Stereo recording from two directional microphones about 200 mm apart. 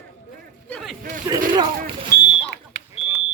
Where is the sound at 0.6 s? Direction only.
Centre (ahead or behind).